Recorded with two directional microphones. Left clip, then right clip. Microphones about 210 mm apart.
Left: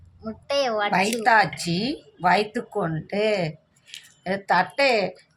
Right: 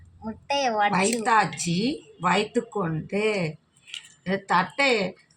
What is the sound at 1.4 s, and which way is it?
A woman's voice, 45° left (ahead or behind).